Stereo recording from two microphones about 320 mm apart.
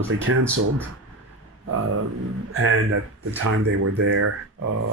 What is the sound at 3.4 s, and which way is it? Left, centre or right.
Mantra, right.